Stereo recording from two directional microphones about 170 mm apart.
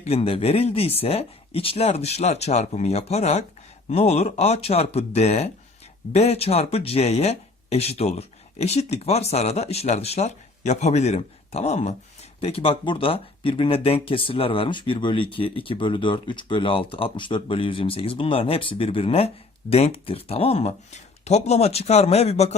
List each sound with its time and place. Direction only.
0.0 s speech: 35° left (ahead or behind)